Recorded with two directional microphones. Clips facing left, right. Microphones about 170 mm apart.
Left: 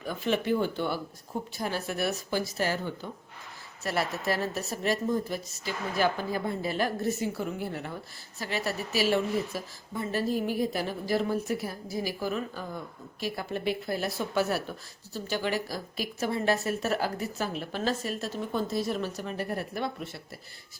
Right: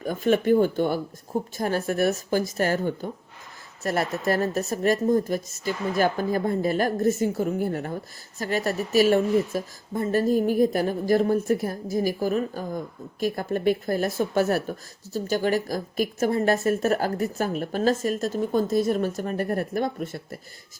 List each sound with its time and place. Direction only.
0.0 s a woman's voice: 45° right (ahead or behind)